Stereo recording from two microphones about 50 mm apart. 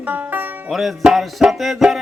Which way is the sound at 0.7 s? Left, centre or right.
Centre.